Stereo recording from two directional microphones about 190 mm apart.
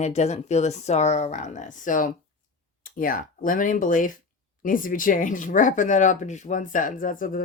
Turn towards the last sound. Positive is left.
turn(degrees=45)  # may be behind; listen again after turning